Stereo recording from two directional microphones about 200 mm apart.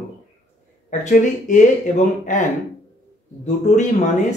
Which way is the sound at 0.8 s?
40° left (ahead or behind).